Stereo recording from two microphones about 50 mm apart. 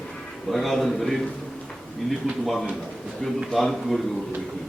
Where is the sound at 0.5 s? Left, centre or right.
Centre.